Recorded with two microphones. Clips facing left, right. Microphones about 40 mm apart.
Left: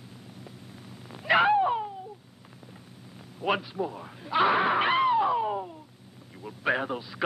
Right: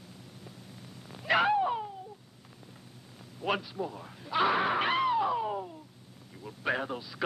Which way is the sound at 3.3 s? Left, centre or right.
Centre.